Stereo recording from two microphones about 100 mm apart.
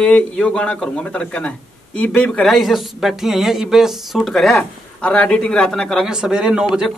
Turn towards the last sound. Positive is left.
turn(degrees=-10)  # may be behind; listen again after turning